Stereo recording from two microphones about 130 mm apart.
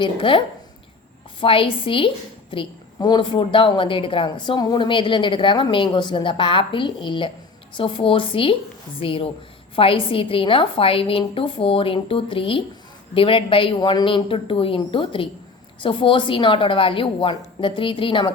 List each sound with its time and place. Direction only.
0.0 s a woman's voice: 40° left (ahead or behind)